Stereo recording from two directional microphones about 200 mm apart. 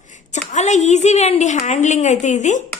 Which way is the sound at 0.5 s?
35° left (ahead or behind).